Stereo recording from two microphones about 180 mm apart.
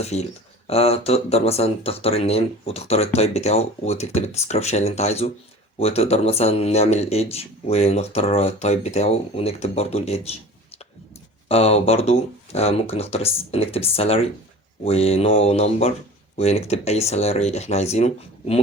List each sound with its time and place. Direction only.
0.0 s speech: 40° left (ahead or behind)